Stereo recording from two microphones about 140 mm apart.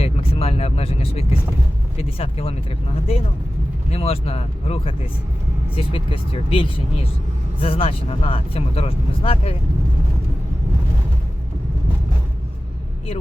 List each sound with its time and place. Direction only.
0.0 s vehicle: 45° left (ahead or behind)
2.0 s speech: 45° left (ahead or behind)